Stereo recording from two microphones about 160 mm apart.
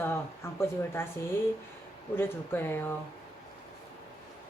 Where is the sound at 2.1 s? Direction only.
15° left (ahead or behind).